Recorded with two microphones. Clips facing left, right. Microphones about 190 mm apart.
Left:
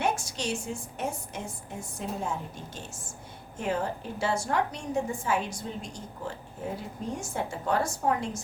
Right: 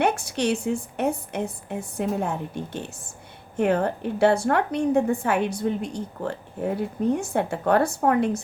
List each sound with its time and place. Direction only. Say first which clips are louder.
0.0 s a woman's voice: right 7 dB; 60° right (ahead or behind)